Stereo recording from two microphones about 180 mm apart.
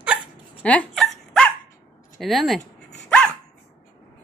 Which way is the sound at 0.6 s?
5° left (ahead or behind).